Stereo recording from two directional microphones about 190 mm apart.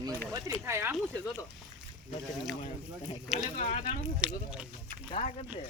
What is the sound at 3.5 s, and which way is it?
Speech, 40° left (ahead or behind).